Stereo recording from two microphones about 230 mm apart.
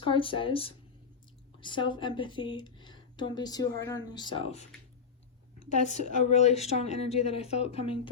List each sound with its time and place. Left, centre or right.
0.0 s speech: left
5.6 s speech: left